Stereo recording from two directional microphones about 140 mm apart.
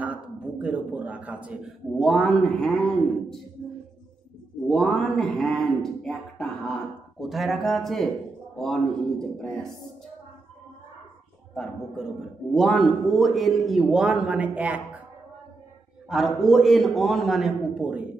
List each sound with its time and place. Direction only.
0.0 s a man's voice: 10° right (ahead or behind)
4.6 s a man's voice: 5° left (ahead or behind)
11.5 s a man's voice: 5° left (ahead or behind)
16.1 s a man's voice: centre (ahead or behind)